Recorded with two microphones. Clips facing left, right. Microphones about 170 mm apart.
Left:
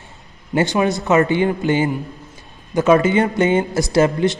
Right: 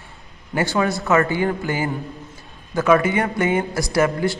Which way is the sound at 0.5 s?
20° left (ahead or behind).